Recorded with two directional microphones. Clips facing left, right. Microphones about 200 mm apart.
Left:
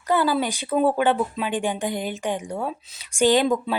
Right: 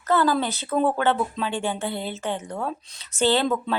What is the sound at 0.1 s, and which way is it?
A woman's voice, 10° left (ahead or behind).